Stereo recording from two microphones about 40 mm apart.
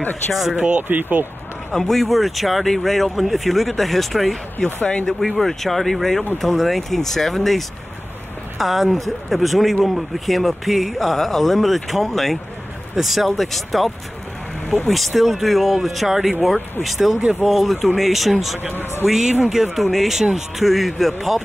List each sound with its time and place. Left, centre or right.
0.3 s speech: centre
0.7 s speech: right
1.7 s speech: centre
4.6 s speech: centre
18.6 s speech: right
19.0 s a man's voice: centre